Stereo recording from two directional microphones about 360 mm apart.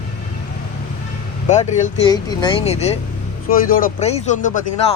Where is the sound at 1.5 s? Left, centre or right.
Centre.